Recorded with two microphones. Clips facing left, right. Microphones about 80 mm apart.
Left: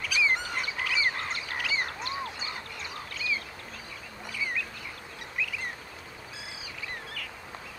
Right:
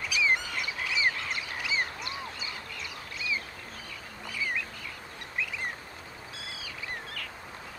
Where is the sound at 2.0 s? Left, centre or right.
Left.